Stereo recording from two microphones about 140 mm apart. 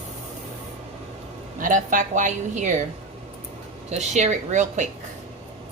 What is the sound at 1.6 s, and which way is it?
A woman's voice, 70° right (ahead or behind).